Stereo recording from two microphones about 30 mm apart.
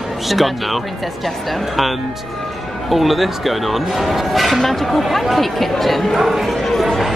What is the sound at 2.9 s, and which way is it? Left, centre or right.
Speech, centre.